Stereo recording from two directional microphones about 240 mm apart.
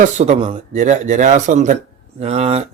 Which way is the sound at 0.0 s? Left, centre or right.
Right.